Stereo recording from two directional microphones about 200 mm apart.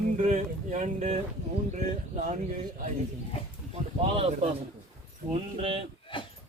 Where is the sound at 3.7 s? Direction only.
30° right (ahead or behind).